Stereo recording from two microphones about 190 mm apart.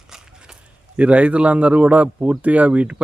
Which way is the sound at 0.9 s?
5° right (ahead or behind).